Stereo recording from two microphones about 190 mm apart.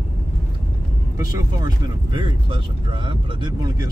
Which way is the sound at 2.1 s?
25° right (ahead or behind).